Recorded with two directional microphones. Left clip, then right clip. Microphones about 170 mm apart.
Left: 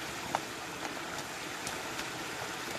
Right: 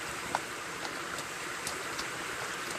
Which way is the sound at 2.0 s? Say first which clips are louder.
Right 2 dB; 65° left (ahead or behind).